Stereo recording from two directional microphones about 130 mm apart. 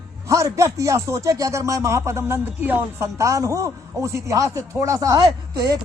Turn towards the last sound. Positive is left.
turn(degrees=-30)  # may be behind; listen again after turning